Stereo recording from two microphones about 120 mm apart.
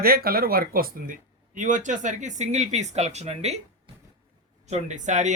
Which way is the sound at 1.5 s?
90° right.